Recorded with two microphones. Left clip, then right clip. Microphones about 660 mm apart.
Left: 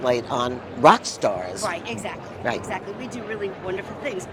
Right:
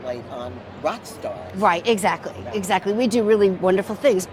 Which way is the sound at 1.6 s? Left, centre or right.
Right.